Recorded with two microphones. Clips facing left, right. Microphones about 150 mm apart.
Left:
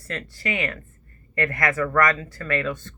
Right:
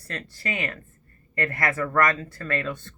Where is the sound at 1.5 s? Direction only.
30° right (ahead or behind).